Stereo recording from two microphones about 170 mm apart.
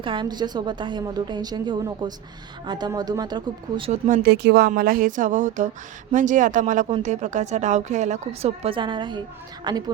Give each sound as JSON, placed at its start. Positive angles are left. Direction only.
{"t": 0.0, "sound": "a woman's voice", "side_deg": -30}
{"t": 4.1, "sound": "a woman's voice", "side_deg": -70}